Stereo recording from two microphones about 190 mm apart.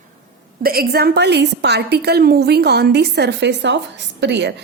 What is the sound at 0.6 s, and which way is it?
A woman's voice, 50° right (ahead or behind).